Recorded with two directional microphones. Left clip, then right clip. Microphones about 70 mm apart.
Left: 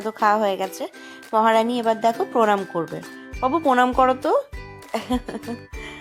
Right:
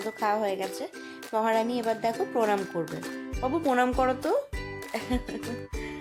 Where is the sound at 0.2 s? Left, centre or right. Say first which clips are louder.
Left 9 dB; left.